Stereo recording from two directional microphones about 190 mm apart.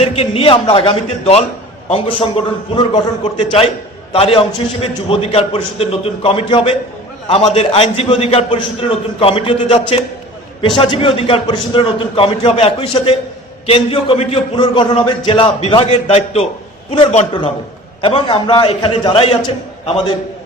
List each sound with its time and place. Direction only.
0.0 s a man's voice: 30° left (ahead or behind)
4.1 s a man's voice: 30° left (ahead or behind)